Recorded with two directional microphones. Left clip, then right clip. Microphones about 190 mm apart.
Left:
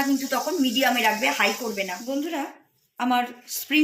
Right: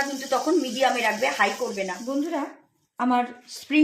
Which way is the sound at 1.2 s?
50° right (ahead or behind).